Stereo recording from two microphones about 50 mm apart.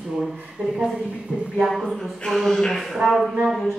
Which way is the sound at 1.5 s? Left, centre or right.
Centre.